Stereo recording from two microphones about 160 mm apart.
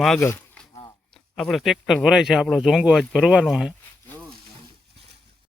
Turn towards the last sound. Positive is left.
turn(degrees=0)  # may be behind; listen again after turning